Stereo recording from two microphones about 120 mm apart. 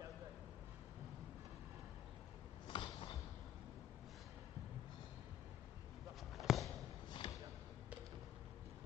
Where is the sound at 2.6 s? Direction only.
45° left (ahead or behind).